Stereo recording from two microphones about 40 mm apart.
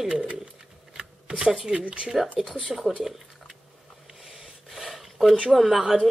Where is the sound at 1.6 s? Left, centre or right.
Right.